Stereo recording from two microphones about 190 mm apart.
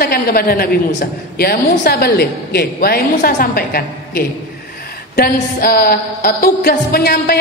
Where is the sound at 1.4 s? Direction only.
55° left (ahead or behind).